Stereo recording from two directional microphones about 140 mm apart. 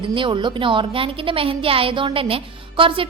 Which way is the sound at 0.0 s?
35° right (ahead or behind).